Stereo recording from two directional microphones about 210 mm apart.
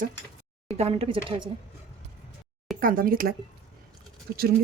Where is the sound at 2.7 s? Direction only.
45° right (ahead or behind).